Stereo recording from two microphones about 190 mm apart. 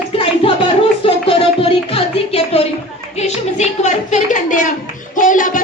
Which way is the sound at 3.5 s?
40° left (ahead or behind).